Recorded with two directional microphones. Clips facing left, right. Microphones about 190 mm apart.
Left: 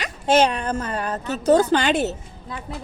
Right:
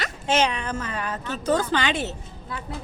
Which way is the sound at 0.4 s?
35° left (ahead or behind).